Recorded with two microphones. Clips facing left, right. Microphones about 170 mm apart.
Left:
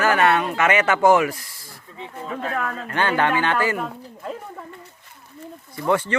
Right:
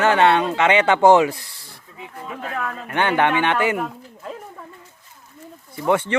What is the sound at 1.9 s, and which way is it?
Speech, 30° left (ahead or behind).